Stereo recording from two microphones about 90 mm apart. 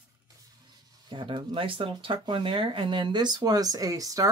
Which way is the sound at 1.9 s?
65° right (ahead or behind).